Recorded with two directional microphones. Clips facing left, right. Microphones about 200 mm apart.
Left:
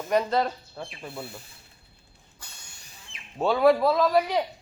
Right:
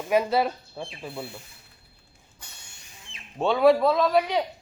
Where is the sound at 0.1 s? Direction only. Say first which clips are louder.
Right 2 dB; 5° right (ahead or behind).